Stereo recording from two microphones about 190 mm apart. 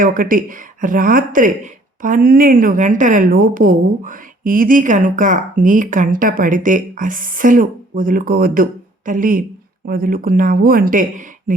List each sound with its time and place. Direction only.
0.0 s speech: 45° right (ahead or behind)